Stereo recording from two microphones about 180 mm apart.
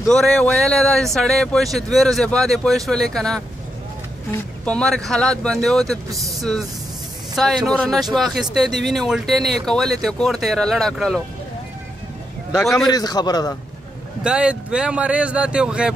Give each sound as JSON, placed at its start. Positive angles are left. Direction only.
{"t": 0.1, "sound": "speech", "side_deg": 0}
{"t": 4.6, "sound": "speech", "side_deg": 5}
{"t": 7.3, "sound": "speech", "side_deg": 0}
{"t": 12.8, "sound": "a man's voice", "side_deg": 20}
{"t": 14.2, "sound": "speech", "side_deg": -5}